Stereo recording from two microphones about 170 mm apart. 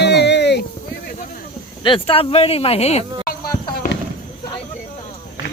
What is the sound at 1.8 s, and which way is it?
Speech, 30° left (ahead or behind).